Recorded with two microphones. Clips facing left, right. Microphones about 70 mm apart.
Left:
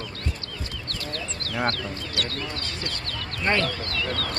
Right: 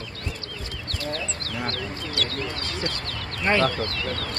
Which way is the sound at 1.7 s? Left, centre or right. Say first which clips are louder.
Right 1 dB; right.